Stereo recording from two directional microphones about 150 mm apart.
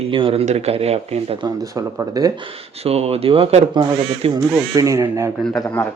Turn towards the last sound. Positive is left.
turn(degrees=5)  # may be behind; listen again after turning